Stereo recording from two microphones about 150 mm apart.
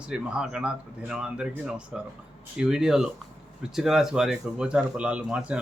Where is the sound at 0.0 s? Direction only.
5° right (ahead or behind).